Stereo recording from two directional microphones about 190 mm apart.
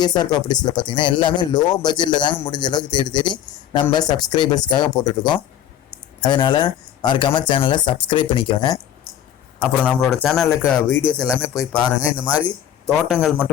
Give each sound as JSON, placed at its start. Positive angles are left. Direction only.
{"t": 0.0, "sound": "speech", "side_deg": 20}
{"t": 9.8, "sound": "speech", "side_deg": 0}
{"t": 12.8, "sound": "speech", "side_deg": -5}